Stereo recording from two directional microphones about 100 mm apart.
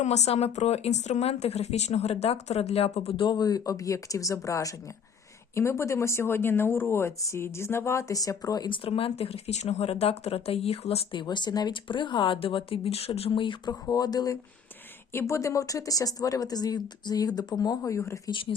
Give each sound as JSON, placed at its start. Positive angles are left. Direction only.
{"t": 0.1, "sound": "speech", "side_deg": 90}
{"t": 3.2, "sound": "speech", "side_deg": 40}
{"t": 8.7, "sound": "speech", "side_deg": 70}
{"t": 11.1, "sound": "speech", "side_deg": 50}
{"t": 13.4, "sound": "speech", "side_deg": 55}
{"t": 13.8, "sound": "speech", "side_deg": 40}
{"t": 15.1, "sound": "speech", "side_deg": 25}
{"t": 18.3, "sound": "speech", "side_deg": 60}